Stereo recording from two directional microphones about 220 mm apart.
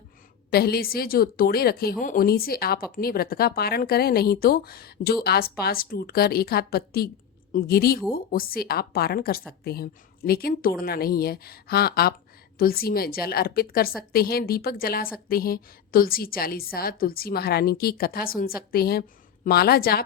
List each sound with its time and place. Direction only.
0.5 s a woman's voice: 45° left (ahead or behind)